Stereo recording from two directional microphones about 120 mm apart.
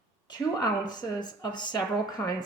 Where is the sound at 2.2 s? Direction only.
15° left (ahead or behind).